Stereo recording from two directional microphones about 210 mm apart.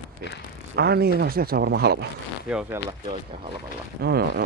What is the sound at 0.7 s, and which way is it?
Speech, 50° right (ahead or behind).